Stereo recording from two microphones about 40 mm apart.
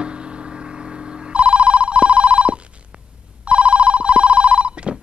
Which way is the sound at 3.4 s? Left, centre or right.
Right.